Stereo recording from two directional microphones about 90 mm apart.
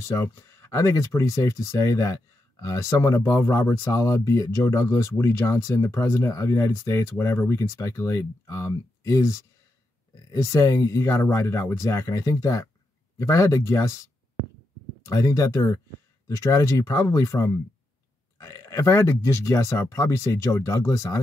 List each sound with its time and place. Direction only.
0.0 s speech: 30° left (ahead or behind)
10.4 s speech: 30° left (ahead or behind)
15.0 s speech: 35° left (ahead or behind)